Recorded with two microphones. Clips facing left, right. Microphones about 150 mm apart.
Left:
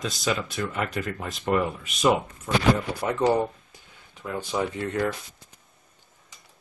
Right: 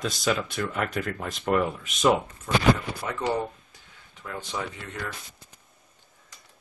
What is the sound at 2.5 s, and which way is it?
Speech, 10° left (ahead or behind).